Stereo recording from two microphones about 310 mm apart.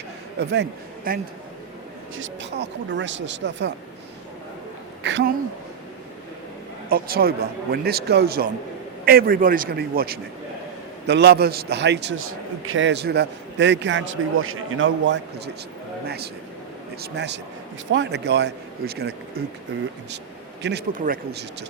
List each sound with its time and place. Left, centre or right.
0.3 s a man's voice: right
5.0 s a man's voice: right
6.8 s a man's voice: right
20.6 s a man's voice: right